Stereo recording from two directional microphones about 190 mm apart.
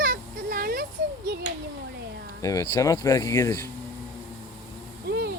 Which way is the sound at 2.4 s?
20° left (ahead or behind).